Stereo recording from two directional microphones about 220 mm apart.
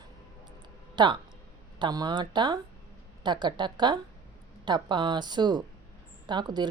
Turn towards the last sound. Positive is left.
turn(degrees=-20)  # may be behind; listen again after turning